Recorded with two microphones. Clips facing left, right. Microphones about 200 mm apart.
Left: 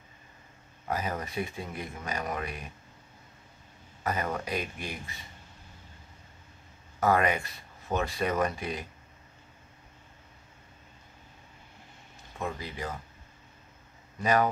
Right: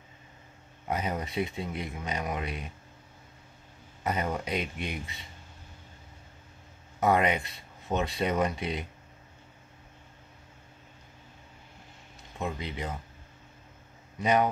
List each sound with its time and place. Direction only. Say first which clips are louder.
0.8 s speech: right 1 dB; 20° right (ahead or behind)
4.0 s speech: right 1 dB; 20° right (ahead or behind)
7.0 s speech: right 1 dB; 20° right (ahead or behind)
12.4 s speech: right 1 dB; 20° right (ahead or behind)
14.2 s speech: even; 20° right (ahead or behind)